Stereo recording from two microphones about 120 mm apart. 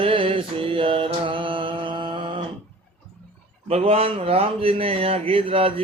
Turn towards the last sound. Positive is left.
turn(degrees=-50)  # may be behind; listen again after turning